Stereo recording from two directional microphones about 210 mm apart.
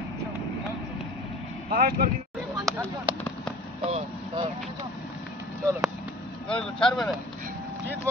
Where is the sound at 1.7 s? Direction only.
40° right (ahead or behind).